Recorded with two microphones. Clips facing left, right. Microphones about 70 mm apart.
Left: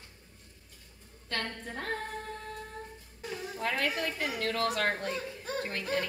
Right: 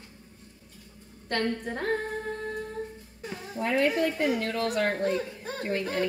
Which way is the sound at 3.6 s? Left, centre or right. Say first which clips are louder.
Right 7 dB; right.